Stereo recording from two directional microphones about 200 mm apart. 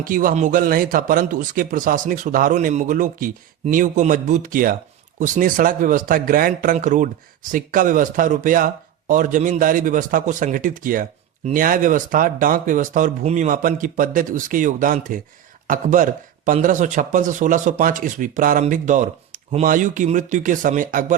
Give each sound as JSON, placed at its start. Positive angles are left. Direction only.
{"t": 0.0, "sound": "a man's voice", "side_deg": -45}